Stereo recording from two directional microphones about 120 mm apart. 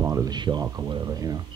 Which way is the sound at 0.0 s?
30° right (ahead or behind).